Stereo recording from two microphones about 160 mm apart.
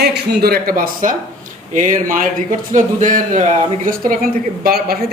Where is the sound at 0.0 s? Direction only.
80° right; by 1.1 s 65° right (ahead or behind).